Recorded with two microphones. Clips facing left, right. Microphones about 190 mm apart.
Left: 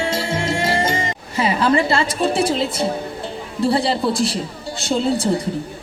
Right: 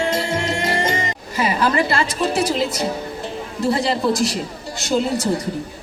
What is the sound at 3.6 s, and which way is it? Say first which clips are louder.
A man's voice: left 1 dB; 30° left (ahead or behind).